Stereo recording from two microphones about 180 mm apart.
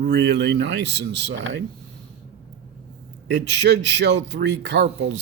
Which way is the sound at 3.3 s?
75° right (ahead or behind).